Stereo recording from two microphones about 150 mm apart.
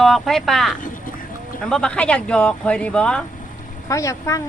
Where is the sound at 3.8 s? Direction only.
20° left (ahead or behind).